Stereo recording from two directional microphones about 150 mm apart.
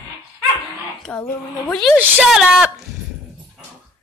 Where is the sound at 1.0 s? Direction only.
5° left (ahead or behind).